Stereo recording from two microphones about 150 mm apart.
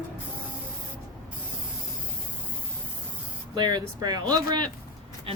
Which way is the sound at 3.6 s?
30° right (ahead or behind).